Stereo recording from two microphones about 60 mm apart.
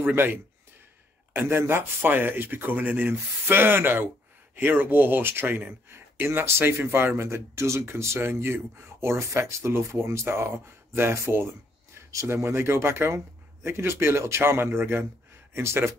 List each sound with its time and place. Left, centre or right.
0.0 s speech: right